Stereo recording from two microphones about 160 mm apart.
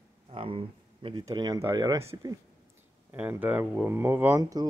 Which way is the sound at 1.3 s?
20° right (ahead or behind).